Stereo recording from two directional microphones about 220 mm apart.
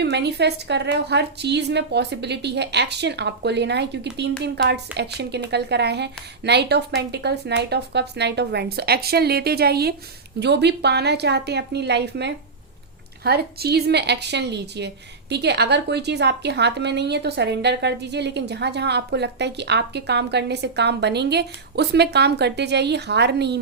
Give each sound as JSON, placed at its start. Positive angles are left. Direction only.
{"t": 0.0, "sound": "a woman's voice", "side_deg": -50}